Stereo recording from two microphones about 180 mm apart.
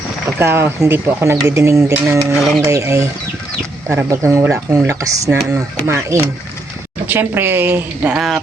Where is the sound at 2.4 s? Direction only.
Centre (ahead or behind).